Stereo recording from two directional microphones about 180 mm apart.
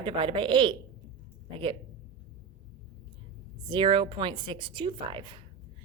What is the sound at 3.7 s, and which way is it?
Speech, 30° right (ahead or behind).